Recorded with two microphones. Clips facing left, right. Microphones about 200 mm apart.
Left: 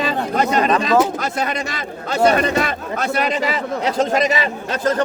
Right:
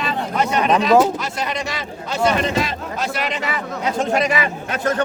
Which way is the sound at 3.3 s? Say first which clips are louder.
Left 5 dB; 35° left (ahead or behind).